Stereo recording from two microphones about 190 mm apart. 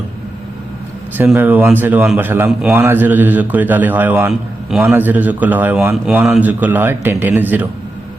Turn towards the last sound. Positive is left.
turn(degrees=-10)  # may be behind; listen again after turning